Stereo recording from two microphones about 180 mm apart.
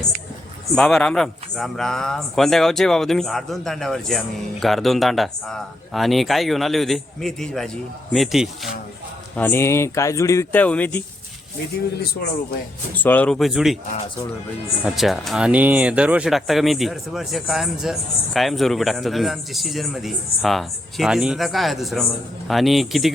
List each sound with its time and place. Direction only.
0.8 s speech: 5° left (ahead or behind)
9.3 s speech: 10° left (ahead or behind)
12.9 s speech: 10° left (ahead or behind)
14.8 s speech: centre (ahead or behind)